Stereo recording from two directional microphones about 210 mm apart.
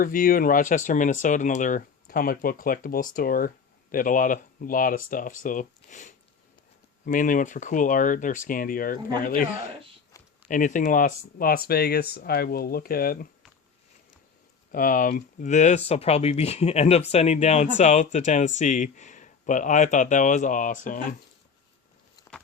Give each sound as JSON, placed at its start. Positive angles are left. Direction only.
{"t": 0.0, "sound": "speech", "side_deg": 40}
{"t": 14.7, "sound": "speech", "side_deg": 40}